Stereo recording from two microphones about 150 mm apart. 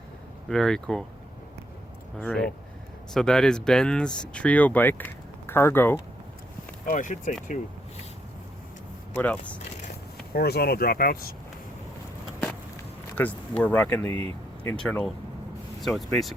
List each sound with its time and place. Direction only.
0.4 s speech: 5° left (ahead or behind)
2.2 s speech: 5° left (ahead or behind)
6.9 s speech: 55° left (ahead or behind)
9.1 s speech: 10° left (ahead or behind)
10.3 s speech: 90° left
13.2 s speech: 15° left (ahead or behind)